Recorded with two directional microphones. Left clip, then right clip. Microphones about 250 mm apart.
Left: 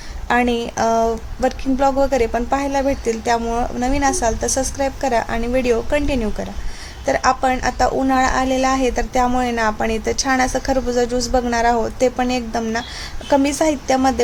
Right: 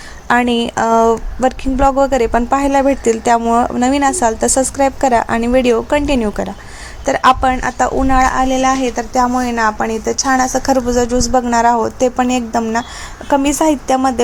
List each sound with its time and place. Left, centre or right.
0.3 s speech: centre
10.7 s speech: centre